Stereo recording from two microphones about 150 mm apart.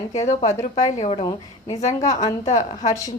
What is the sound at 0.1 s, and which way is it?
A woman's voice, 50° left (ahead or behind).